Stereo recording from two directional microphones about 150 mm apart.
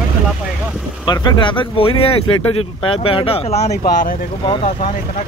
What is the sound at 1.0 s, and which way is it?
Speech, 30° left (ahead or behind).